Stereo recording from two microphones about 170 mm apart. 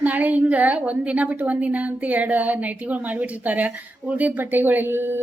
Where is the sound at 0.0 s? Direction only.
10° right (ahead or behind).